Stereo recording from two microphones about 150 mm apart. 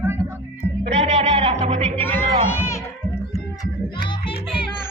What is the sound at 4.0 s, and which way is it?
Music, 35° left (ahead or behind).